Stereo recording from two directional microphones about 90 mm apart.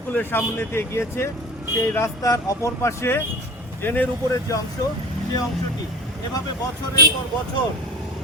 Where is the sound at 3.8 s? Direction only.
20° left (ahead or behind).